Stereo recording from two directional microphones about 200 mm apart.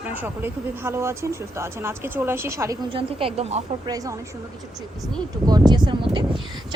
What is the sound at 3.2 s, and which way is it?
Speech, 30° right (ahead or behind).